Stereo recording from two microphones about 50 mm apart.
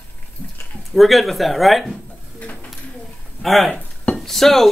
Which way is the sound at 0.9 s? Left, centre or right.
Centre.